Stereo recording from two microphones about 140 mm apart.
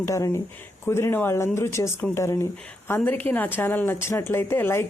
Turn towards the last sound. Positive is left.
turn(degrees=15)  # may be behind; listen again after turning